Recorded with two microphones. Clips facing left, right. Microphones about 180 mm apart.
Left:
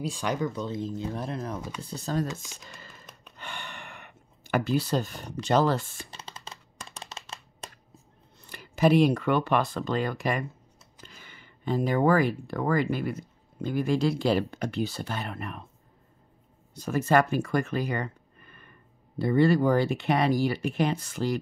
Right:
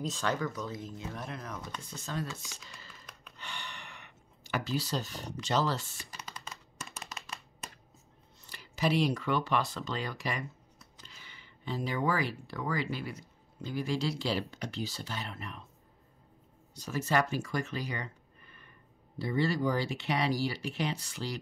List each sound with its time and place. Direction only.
0.0 s speech: 10° left (ahead or behind)
0.5 s speech: 25° left (ahead or behind)
2.7 s computer keyboard: 50° left (ahead or behind)
3.3 s gasp: 55° left (ahead or behind)
6.0 s computer keyboard: 30° left (ahead or behind)
8.4 s speech: 55° left (ahead or behind)
16.7 s speech: 55° left (ahead or behind)